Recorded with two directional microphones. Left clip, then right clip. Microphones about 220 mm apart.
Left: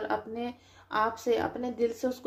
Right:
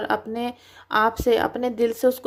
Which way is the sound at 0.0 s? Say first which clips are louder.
Right 7 dB; 35° right (ahead or behind).